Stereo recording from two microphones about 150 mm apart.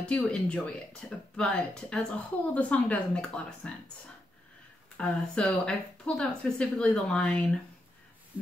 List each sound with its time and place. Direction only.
0.1 s speech: 5° left (ahead or behind)
4.9 s speech: 5° left (ahead or behind)